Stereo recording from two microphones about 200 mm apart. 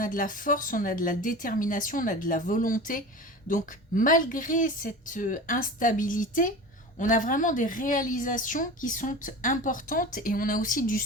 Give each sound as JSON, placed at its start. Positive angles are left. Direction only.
{"t": 0.0, "sound": "a woman's voice", "side_deg": 45}